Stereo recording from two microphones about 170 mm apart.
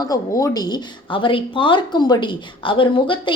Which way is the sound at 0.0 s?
20° left (ahead or behind).